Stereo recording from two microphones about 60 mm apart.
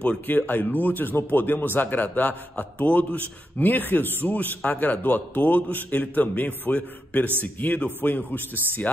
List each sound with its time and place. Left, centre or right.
0.3 s a man's voice: left